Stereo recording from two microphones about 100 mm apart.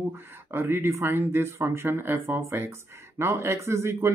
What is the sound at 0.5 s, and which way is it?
Speech, 25° right (ahead or behind).